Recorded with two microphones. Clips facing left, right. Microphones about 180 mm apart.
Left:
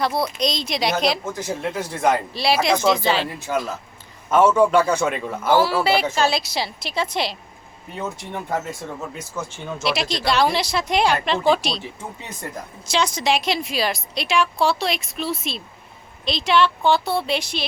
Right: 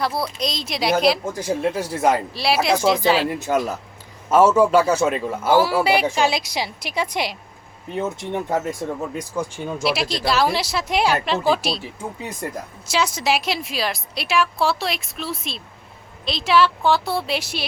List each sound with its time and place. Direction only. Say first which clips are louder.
0.2 s a man's voice: left 3 dB; 5° right (ahead or behind)
4.3 s a man's voice: right 1 dB; 5° right (ahead or behind)
8.8 s speech: right 6 dB; 40° right (ahead or behind)
9.1 s speech: right 5 dB; 10° right (ahead or behind)